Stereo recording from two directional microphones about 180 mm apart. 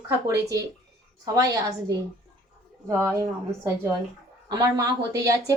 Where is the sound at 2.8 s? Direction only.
15° right (ahead or behind).